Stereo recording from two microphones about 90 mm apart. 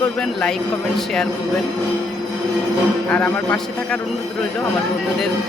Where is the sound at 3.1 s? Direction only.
20° left (ahead or behind).